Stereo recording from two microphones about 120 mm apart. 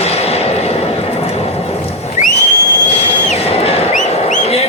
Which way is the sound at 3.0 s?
60° left (ahead or behind).